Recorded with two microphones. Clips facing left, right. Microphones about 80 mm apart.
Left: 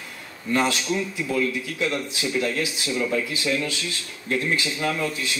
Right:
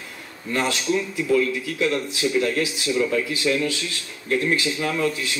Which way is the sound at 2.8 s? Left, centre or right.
Right.